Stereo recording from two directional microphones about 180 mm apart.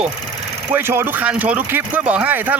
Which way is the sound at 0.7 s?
10° right (ahead or behind).